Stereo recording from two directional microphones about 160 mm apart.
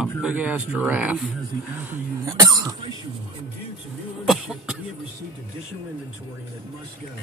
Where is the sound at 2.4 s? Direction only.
25° right (ahead or behind).